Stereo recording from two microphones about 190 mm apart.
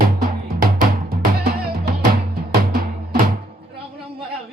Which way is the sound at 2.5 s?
50° right (ahead or behind).